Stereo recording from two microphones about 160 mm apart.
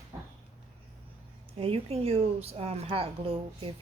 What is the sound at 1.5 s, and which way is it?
A woman's voice, 35° right (ahead or behind).